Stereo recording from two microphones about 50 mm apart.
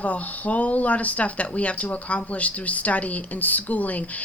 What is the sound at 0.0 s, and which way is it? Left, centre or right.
A woman's voice, left.